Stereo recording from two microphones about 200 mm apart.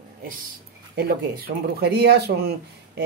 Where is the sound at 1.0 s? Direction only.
50° right (ahead or behind).